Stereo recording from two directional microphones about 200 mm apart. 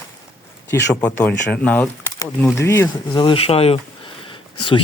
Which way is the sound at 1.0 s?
10° left (ahead or behind).